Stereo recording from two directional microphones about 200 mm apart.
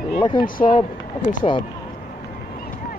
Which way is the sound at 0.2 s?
25° left (ahead or behind).